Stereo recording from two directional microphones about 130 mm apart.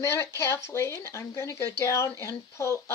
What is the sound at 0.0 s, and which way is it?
Speech, 20° left (ahead or behind).